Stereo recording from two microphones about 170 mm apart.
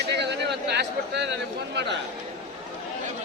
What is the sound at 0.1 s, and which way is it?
A man's voice, 90° right.